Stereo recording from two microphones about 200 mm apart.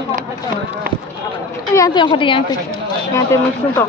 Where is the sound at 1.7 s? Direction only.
20° left (ahead or behind).